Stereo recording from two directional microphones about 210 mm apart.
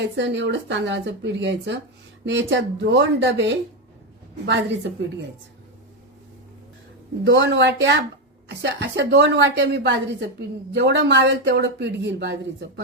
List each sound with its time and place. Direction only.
0.0 s speech: 60° right (ahead or behind)
7.3 s speech: 60° right (ahead or behind)